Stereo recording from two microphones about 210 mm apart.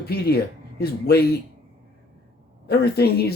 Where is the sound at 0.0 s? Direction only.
50° left (ahead or behind).